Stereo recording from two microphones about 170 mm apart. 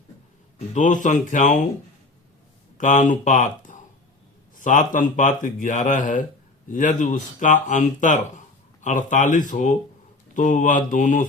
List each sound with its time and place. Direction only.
0.7 s speech: 45° left (ahead or behind)
2.7 s speech: 45° left (ahead or behind)